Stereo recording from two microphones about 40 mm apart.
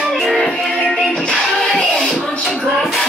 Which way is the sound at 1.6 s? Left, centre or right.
Left.